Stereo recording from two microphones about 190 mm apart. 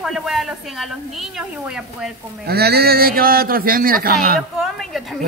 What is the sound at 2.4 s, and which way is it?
A man's voice, 55° right (ahead or behind).